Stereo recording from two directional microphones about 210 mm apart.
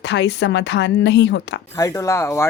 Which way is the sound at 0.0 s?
55° left (ahead or behind).